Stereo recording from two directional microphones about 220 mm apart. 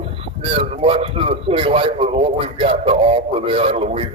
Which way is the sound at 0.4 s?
25° right (ahead or behind).